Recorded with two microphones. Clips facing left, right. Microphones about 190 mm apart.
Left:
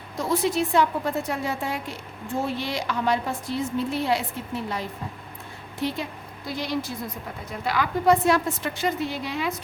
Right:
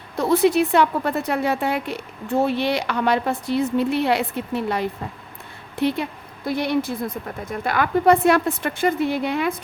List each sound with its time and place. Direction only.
0.2 s a woman's voice: 65° right (ahead or behind)